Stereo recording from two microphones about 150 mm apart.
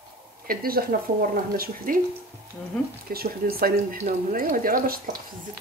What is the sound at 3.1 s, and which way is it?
Speech, 75° right (ahead or behind).